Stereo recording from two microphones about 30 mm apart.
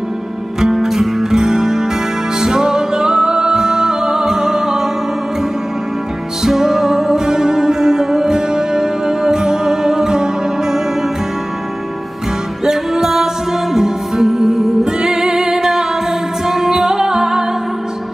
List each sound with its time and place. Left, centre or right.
0.7 s music: centre
1.3 s music: right
6.4 s music: centre
12.6 s music: centre
16.4 s music: centre